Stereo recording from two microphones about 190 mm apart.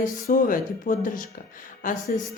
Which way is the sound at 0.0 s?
45° left (ahead or behind).